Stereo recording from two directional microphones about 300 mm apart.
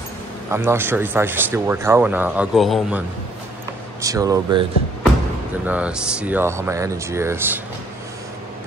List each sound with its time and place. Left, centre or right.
0.5 s speech: centre
4.0 s speech: centre
5.7 s speech: centre